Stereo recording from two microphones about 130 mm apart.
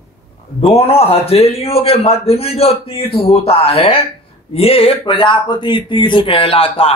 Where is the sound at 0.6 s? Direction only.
50° left (ahead or behind).